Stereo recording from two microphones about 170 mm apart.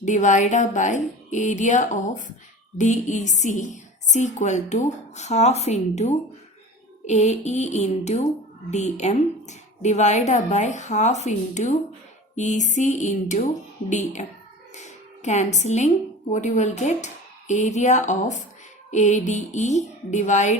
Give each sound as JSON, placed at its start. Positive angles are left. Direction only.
{"t": 0.0, "sound": "a woman's voice", "side_deg": 45}